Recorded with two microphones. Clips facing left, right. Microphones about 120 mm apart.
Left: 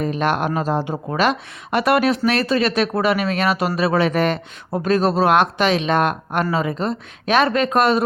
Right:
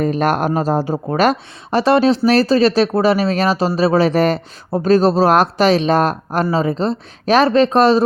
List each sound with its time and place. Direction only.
0.0 s speech: 40° right (ahead or behind)
1.8 s speech: 30° right (ahead or behind)